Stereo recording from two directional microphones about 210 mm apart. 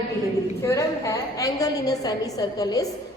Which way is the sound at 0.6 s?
15° left (ahead or behind).